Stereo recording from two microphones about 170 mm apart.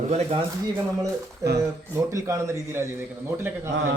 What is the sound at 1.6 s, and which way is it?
A man's voice, 15° right (ahead or behind).